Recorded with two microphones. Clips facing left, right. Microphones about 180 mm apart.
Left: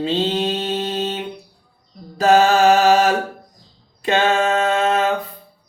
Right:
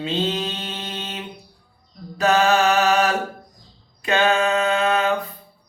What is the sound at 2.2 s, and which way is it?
Mantra, 35° left (ahead or behind).